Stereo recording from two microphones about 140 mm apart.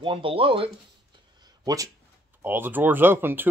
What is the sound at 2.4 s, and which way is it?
Speech, 15° right (ahead or behind).